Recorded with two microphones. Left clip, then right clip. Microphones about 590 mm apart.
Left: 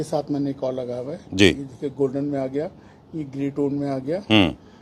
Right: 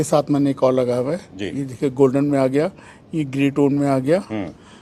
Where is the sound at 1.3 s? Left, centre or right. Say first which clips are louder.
Left 12 dB; left.